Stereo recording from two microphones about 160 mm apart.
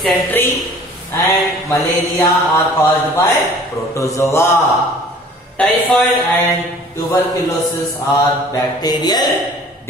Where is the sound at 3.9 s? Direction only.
20° left (ahead or behind).